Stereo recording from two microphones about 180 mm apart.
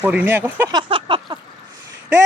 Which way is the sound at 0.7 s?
25° right (ahead or behind).